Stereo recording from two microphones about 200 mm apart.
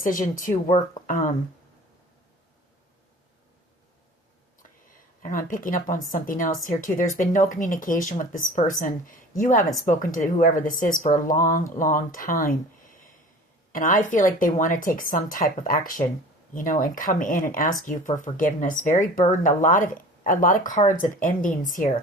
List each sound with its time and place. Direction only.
0.0 s speech: 40° left (ahead or behind)
5.2 s a woman's voice: 40° left (ahead or behind)
13.7 s a woman's voice: 40° left (ahead or behind)